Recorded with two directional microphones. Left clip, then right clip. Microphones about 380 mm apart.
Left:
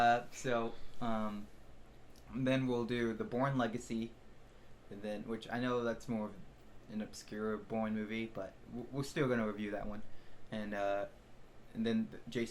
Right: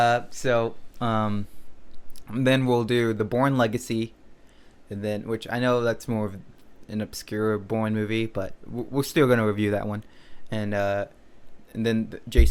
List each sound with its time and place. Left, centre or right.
0.0 s speech: right